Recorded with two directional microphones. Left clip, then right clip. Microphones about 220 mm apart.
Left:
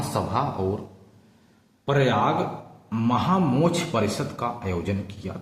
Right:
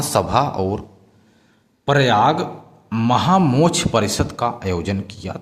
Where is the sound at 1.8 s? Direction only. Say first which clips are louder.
Right 7 dB; 50° right (ahead or behind).